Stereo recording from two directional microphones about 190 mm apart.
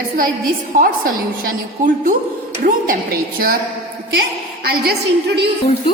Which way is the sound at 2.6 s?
50° right (ahead or behind).